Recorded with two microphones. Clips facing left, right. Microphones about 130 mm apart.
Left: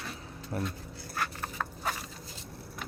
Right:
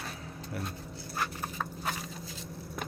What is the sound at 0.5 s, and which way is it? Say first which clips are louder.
Speech: left 5 dB; 45° left (ahead or behind).